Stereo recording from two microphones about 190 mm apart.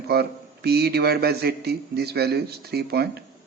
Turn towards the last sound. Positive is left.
turn(degrees=-55)  # may be behind; listen again after turning